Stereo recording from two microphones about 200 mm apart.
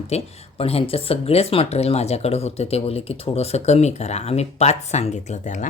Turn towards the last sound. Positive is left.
turn(degrees=35)  # may be behind; listen again after turning